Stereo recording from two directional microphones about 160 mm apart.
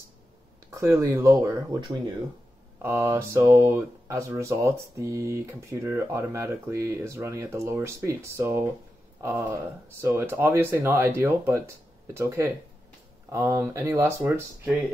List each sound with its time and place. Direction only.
0.7 s speech: 15° right (ahead or behind)
2.8 s speech: 15° right (ahead or behind)